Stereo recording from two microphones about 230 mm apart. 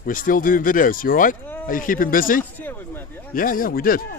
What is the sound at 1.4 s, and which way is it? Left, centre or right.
Speech, centre.